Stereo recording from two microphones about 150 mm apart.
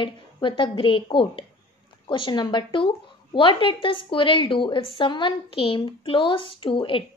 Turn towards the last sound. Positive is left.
turn(degrees=35)  # may be behind; listen again after turning